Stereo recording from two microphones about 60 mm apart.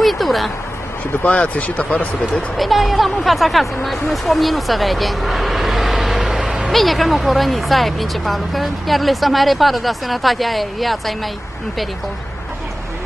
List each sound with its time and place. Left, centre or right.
0.0 s a sound: centre
1.2 s speech: left
2.5 s speech: centre
6.7 s speech: centre